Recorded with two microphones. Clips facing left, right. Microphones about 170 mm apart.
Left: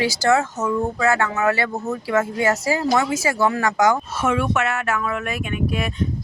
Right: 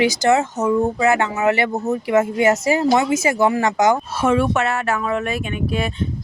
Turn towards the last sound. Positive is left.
turn(degrees=-30)  # may be behind; listen again after turning